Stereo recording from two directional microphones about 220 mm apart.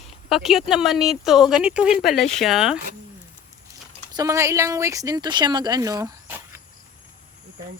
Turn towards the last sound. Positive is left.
turn(degrees=-10)  # may be behind; listen again after turning